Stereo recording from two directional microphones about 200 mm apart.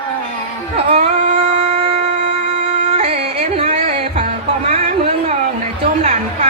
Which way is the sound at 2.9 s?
35° right (ahead or behind).